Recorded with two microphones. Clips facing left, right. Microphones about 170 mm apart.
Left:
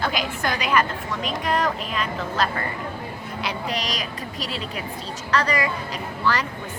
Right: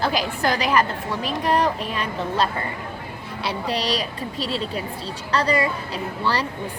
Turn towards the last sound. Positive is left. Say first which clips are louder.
# right 1 dB
turn(degrees=-30)  # may be behind; listen again after turning